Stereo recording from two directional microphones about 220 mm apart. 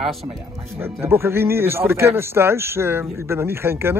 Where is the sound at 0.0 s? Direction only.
Centre (ahead or behind).